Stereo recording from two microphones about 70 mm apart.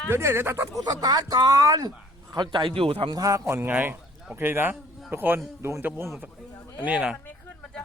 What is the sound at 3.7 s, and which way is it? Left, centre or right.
Speech, right.